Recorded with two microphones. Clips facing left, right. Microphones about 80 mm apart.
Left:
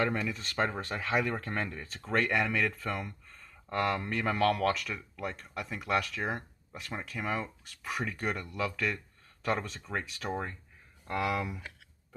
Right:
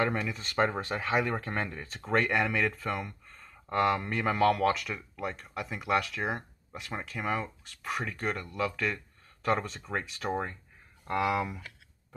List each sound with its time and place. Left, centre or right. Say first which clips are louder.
0.0 s speech: right 1 dB; centre